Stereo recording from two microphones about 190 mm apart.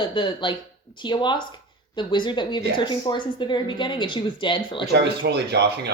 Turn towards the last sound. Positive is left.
turn(degrees=-60)  # may be behind; listen again after turning